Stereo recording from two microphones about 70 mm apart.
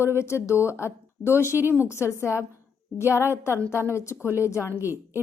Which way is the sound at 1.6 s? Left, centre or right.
Right.